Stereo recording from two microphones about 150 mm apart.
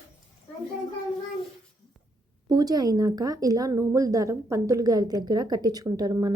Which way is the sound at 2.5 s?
25° right (ahead or behind).